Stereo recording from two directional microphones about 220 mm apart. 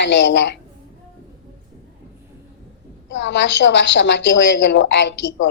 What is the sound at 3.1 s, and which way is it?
A woman's voice, 55° left (ahead or behind).